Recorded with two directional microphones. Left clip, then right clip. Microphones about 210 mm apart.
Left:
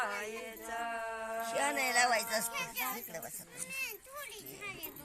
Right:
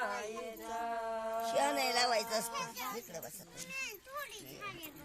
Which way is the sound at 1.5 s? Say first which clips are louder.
Left 1 dB; 60° right (ahead or behind).